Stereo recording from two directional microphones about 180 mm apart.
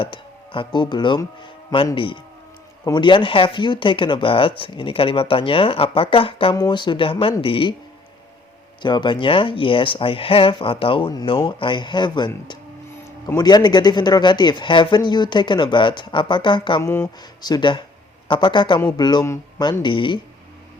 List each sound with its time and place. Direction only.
0.0 s speech: 30° left (ahead or behind)
8.8 s speech: 25° left (ahead or behind)
16.8 s speech: 15° left (ahead or behind)